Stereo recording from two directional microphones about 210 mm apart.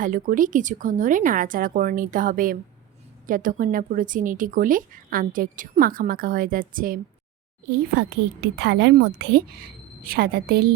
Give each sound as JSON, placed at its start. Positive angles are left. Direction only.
{"t": 0.0, "sound": "a woman's voice", "side_deg": -40}